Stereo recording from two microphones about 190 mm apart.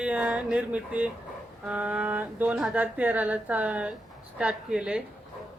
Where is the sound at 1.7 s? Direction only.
10° right (ahead or behind).